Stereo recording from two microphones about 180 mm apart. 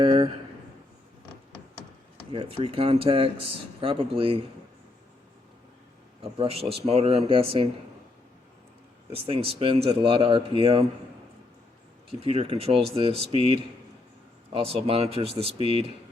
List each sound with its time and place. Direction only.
0.0 s a sound: 30° right (ahead or behind)
2.3 s speech: 30° right (ahead or behind)
6.3 s speech: 30° right (ahead or behind)
9.1 s speech: 30° right (ahead or behind)
12.2 s speech: 30° right (ahead or behind)